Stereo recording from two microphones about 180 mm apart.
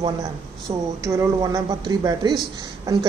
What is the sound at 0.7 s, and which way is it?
Speech, 35° right (ahead or behind).